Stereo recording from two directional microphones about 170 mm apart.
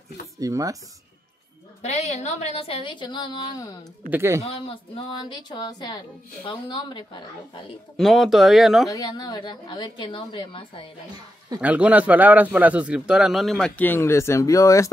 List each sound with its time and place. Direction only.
0.4 s speech: 20° right (ahead or behind)
1.8 s a woman's voice: 40° left (ahead or behind); by 3.7 s 25° left (ahead or behind)
4.1 s speech: 15° right (ahead or behind)
4.5 s speech: 30° left (ahead or behind)
8.0 s speech: centre (ahead or behind)
8.9 s speech: 20° left (ahead or behind)
11.6 s speech: 10° right (ahead or behind); by 14.9 s 20° left (ahead or behind)